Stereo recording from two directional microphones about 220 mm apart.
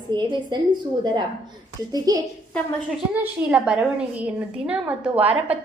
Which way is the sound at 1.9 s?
15° right (ahead or behind).